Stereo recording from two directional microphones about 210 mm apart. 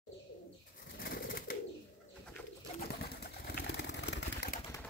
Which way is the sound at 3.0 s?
50° left (ahead or behind).